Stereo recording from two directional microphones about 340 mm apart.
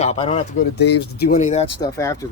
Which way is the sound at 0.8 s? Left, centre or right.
Left.